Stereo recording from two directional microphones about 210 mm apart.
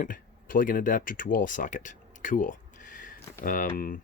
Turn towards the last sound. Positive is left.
turn(degrees=40)  # may be behind; listen again after turning